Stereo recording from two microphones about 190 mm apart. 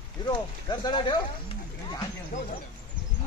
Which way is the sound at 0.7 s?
25° left (ahead or behind).